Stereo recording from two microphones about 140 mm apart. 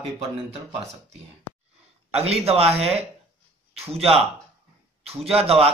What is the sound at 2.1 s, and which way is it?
Speech, 45° right (ahead or behind).